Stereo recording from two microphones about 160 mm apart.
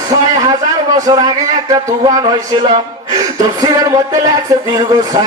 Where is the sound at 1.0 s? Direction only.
25° right (ahead or behind).